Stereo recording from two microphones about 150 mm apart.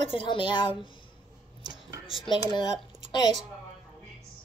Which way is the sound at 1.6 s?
25° right (ahead or behind).